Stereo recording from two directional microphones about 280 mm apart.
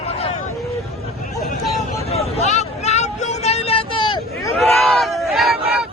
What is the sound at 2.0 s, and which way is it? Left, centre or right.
Vehicle, left.